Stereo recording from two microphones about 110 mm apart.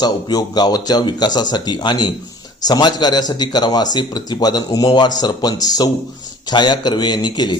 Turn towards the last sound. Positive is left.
turn(degrees=40)  # may be behind; listen again after turning